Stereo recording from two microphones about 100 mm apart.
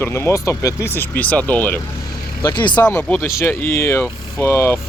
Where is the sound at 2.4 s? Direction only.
50° left (ahead or behind).